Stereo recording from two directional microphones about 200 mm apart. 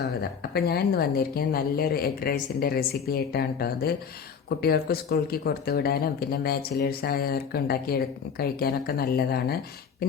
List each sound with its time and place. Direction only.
0.0 s speech: 50° left (ahead or behind)